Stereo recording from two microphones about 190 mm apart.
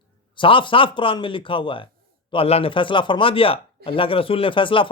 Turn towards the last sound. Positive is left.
turn(degrees=25)  # may be behind; listen again after turning